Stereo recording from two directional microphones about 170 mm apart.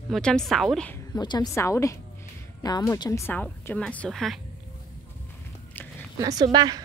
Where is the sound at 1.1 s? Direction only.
25° left (ahead or behind); by 4.3 s centre (ahead or behind).